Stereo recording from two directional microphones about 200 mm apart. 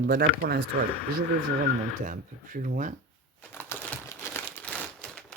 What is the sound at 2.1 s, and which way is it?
Speech, 40° right (ahead or behind).